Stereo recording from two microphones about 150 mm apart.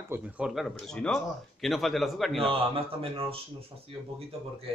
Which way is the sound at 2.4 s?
35° right (ahead or behind).